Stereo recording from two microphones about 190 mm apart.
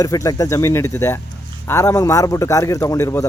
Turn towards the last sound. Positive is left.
turn(degrees=15)  # may be behind; listen again after turning